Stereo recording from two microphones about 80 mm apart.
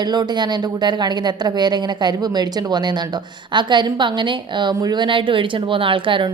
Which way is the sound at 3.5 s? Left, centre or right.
Right.